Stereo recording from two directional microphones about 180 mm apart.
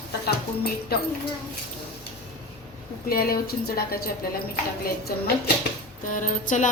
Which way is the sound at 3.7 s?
55° left (ahead or behind).